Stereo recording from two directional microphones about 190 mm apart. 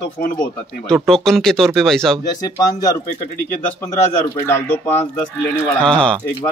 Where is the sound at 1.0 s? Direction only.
Centre (ahead or behind).